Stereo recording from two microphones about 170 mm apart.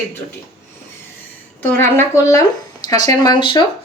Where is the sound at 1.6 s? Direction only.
15° left (ahead or behind).